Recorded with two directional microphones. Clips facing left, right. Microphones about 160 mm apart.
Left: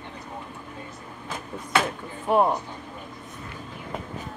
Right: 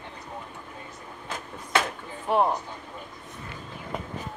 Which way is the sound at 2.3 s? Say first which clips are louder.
Left 2 dB; 5° left (ahead or behind).